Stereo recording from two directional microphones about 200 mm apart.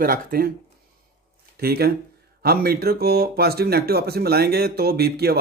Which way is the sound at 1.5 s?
50° right (ahead or behind).